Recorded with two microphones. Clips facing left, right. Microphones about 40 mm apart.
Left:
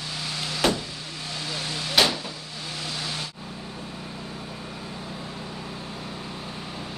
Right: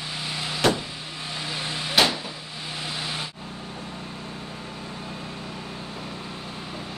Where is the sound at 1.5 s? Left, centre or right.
Centre.